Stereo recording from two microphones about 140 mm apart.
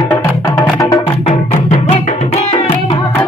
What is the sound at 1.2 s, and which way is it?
Music, 60° left (ahead or behind).